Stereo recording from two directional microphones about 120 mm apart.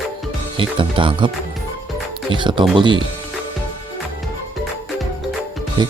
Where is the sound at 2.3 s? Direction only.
40° right (ahead or behind).